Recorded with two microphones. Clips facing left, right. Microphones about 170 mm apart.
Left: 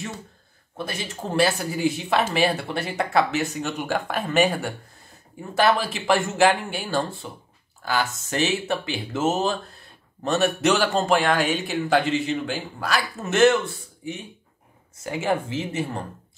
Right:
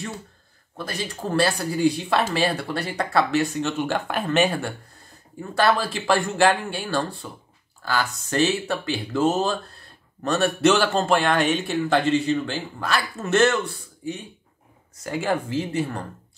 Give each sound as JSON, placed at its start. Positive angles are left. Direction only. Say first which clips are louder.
{"t": 0.7, "sound": "speech", "louder": "even", "side_deg": 20}
{"t": 5.5, "sound": "speech", "louder": "even", "side_deg": 20}
{"t": 15.5, "sound": "speech", "louder": "right 2 dB", "side_deg": 20}